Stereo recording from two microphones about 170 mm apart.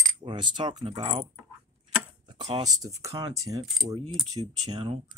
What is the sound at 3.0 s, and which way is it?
Speech, 20° right (ahead or behind).